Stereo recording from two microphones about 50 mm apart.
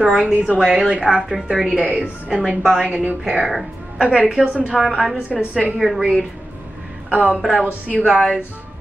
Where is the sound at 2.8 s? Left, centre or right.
Right.